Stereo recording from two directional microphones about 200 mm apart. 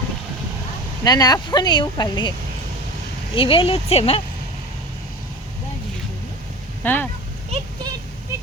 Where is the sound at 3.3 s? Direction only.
25° left (ahead or behind).